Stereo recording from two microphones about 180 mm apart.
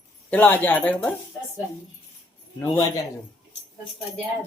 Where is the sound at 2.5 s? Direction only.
10° left (ahead or behind).